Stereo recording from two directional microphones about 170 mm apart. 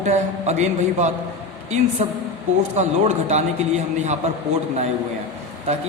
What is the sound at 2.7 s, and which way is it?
A man's voice, 40° right (ahead or behind).